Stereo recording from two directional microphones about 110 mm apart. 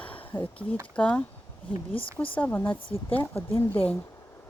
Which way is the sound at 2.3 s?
15° left (ahead or behind).